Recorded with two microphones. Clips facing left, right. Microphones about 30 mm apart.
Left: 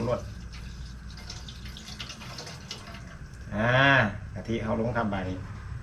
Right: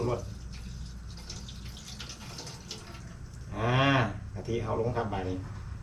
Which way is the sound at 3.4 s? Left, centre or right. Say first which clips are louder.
Left 5 dB; centre.